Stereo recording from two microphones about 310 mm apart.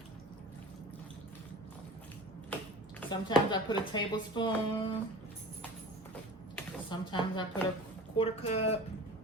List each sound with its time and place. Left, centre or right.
3.0 s speech: centre
6.9 s speech: centre